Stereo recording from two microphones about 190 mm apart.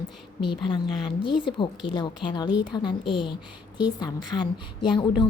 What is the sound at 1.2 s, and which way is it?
A woman's voice, 25° left (ahead or behind).